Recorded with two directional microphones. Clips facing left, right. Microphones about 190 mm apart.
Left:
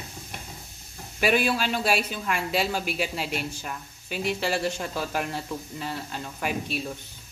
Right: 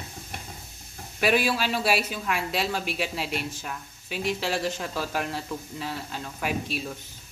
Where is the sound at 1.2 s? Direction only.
Centre (ahead or behind).